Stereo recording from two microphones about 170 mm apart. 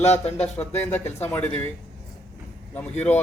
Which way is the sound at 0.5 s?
10° left (ahead or behind).